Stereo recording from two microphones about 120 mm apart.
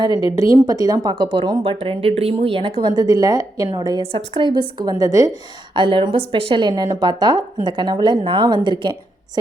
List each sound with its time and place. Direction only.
0.3 s speech: 25° right (ahead or behind)
4.0 s speech: 45° right (ahead or behind); by 5.4 s 30° right (ahead or behind)
5.7 s speech: 45° right (ahead or behind)